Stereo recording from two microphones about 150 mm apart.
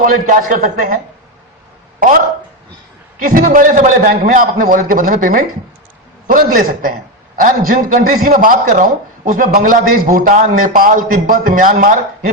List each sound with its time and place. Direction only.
0.0 s a man's voice: 65° right (ahead or behind)
2.0 s a man's voice: 70° right (ahead or behind)